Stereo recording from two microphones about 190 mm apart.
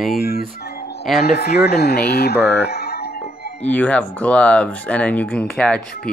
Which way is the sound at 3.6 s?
5° left (ahead or behind).